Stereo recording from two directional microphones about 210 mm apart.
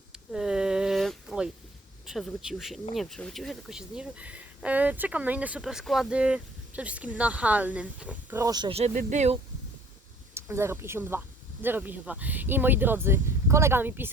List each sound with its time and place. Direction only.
0.1 s a sound: 5° right (ahead or behind)
2.0 s speech: centre (ahead or behind); by 8.9 s 25° right (ahead or behind)
8.9 s speech: 35° right (ahead or behind)
10.3 s speech: 10° right (ahead or behind)